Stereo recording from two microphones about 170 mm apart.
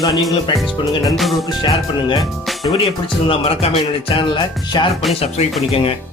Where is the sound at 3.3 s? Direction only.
35° left (ahead or behind).